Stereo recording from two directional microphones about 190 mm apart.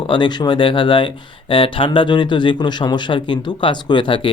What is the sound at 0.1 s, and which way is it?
Speech, 25° left (ahead or behind).